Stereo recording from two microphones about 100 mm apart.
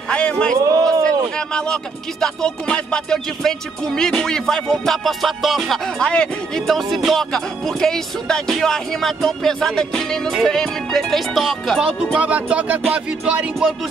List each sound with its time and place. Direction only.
0.1 s a man's voice: 10° left (ahead or behind)
0.6 s a sound: 35° right (ahead or behind)
1.0 s music: 10° left (ahead or behind)
12.2 s speech: 15° right (ahead or behind)